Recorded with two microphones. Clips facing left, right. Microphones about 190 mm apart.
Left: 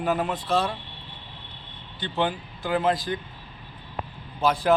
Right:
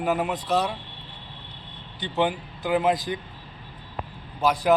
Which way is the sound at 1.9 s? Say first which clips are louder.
Right 2 dB; 15° right (ahead or behind).